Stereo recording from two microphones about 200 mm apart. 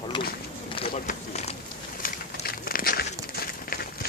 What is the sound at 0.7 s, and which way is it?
Run, 30° left (ahead or behind).